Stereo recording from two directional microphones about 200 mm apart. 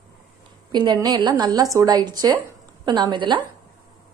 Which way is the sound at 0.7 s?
20° right (ahead or behind).